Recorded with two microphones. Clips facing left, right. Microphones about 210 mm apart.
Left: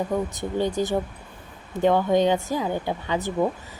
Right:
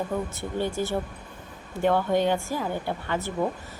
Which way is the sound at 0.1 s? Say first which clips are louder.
Left 4 dB; 15° left (ahead or behind).